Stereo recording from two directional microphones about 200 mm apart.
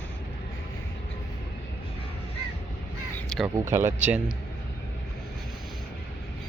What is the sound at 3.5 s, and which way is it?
Speech, 15° right (ahead or behind).